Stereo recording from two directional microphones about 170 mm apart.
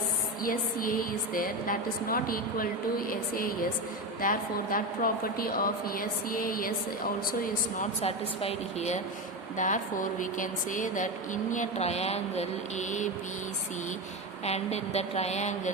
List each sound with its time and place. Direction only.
0.4 s a woman's voice: 55° left (ahead or behind)
7.4 s a woman's voice: 40° left (ahead or behind)
14.4 s speech: 40° left (ahead or behind)